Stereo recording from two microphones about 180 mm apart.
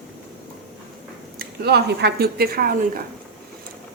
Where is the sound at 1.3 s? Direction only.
65° right (ahead or behind).